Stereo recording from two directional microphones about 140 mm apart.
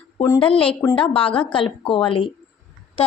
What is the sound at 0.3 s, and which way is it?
A woman's voice, 40° left (ahead or behind).